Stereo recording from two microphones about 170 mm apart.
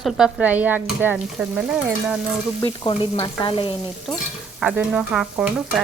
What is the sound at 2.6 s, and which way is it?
Frying, 30° left (ahead or behind).